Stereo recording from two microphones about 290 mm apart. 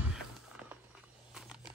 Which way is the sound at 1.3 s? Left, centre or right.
Centre.